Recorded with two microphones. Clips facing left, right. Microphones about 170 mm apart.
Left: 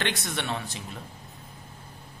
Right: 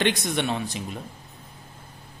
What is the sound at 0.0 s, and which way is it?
Speech, 15° right (ahead or behind).